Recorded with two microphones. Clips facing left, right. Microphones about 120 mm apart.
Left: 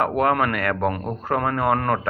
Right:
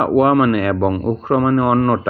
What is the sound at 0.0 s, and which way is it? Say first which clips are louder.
Speech: right 7 dB; 15° right (ahead or behind).